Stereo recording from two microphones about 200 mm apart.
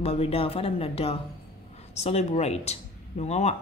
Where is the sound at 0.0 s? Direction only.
30° left (ahead or behind).